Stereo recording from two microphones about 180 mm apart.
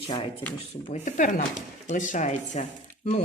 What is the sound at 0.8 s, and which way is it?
Speech, 40° left (ahead or behind).